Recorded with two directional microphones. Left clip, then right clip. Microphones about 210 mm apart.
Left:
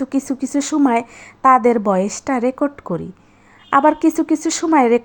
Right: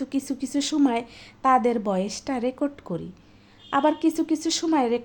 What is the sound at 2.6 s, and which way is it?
Speech, 10° left (ahead or behind).